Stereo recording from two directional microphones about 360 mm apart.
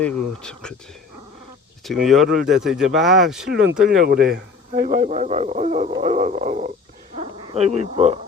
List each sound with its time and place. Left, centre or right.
0.0 s speech: centre
1.8 s speech: centre
2.2 s speech: right
2.5 s speech: centre
3.8 s speech: right